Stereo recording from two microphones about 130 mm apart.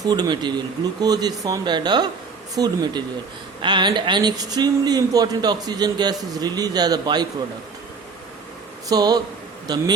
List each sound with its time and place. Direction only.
0.0 s speech: 30° right (ahead or behind)
8.9 s speech: 30° right (ahead or behind)